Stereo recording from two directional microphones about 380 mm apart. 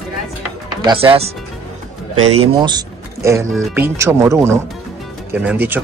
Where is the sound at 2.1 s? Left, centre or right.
Right.